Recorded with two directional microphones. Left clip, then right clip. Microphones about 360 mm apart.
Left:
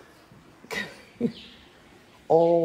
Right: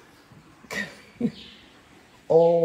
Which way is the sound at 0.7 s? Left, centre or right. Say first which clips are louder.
Right 1 dB; centre.